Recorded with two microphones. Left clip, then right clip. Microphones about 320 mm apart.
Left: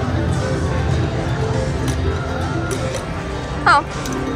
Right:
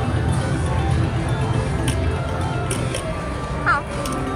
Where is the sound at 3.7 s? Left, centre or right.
Centre.